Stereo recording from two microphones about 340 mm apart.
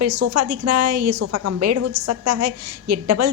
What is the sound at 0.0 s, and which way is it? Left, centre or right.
A woman's voice, right.